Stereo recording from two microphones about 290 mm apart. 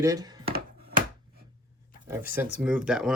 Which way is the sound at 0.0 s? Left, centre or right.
Centre.